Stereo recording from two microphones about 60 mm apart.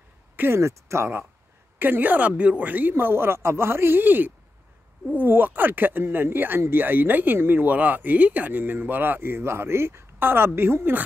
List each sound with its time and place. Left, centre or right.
0.4 s speech: right
1.8 s speech: right